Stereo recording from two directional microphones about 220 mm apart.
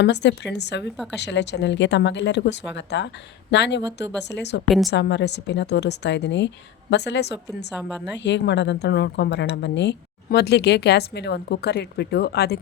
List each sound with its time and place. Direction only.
0.0 s speech: 50° left (ahead or behind)
4.6 s a woman's voice: centre (ahead or behind)
4.9 s speech: 50° left (ahead or behind)